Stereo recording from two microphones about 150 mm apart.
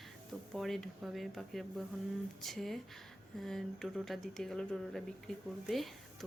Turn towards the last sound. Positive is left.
turn(degrees=0)  # may be behind; listen again after turning